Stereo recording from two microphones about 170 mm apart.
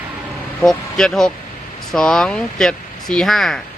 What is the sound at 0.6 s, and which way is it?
Speech, 5° left (ahead or behind).